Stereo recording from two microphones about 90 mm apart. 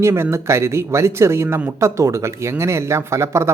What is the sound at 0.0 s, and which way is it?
Speech, 30° right (ahead or behind).